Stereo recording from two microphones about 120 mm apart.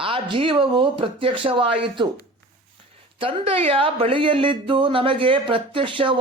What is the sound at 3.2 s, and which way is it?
Speech, 50° right (ahead or behind).